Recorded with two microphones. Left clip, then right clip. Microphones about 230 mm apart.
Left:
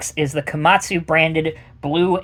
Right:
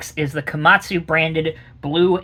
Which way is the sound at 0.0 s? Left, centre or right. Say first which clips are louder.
Left 2 dB; left.